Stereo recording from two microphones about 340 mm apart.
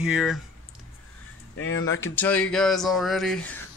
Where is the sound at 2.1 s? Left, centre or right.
Centre.